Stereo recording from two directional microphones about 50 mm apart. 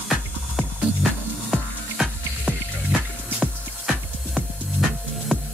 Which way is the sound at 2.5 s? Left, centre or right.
Right.